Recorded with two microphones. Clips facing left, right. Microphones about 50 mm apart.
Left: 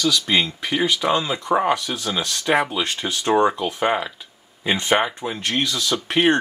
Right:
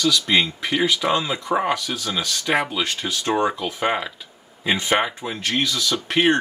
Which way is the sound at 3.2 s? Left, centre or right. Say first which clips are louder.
Left 4 dB; centre.